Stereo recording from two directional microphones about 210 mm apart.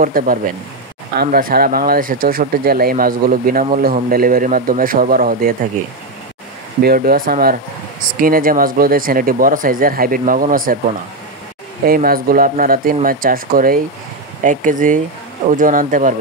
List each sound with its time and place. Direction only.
0.0 s speech: 40° right (ahead or behind)
6.8 s speech: 45° right (ahead or behind)
11.8 s speech: 45° right (ahead or behind)